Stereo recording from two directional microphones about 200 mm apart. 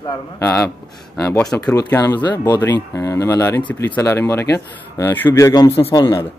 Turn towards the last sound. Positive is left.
turn(degrees=20)  # may be behind; listen again after turning